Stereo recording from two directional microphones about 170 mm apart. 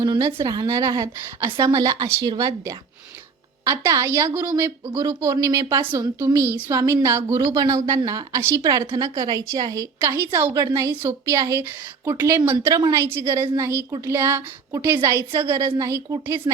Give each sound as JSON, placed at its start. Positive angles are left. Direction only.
{"t": 0.0, "sound": "a woman's voice", "side_deg": -25}